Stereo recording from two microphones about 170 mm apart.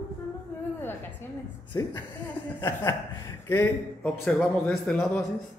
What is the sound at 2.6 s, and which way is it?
A man's voice, 15° left (ahead or behind).